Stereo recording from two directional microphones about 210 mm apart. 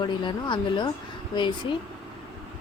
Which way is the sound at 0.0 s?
20° left (ahead or behind).